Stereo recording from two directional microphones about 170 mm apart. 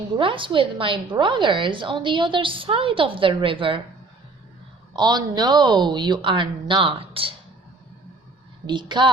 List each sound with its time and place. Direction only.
0.2 s a woman's voice: 30° right (ahead or behind)
4.9 s a woman's voice: 25° right (ahead or behind)
8.6 s a woman's voice: 25° right (ahead or behind)